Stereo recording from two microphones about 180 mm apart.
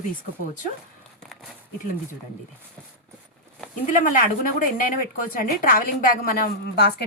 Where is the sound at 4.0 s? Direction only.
50° left (ahead or behind).